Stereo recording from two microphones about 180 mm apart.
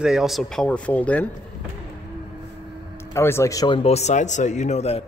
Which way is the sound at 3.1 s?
15° left (ahead or behind).